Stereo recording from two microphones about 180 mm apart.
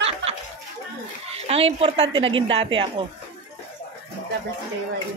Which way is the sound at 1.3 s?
35° right (ahead or behind).